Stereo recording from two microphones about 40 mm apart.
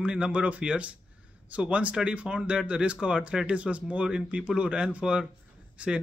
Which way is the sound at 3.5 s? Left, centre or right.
Right.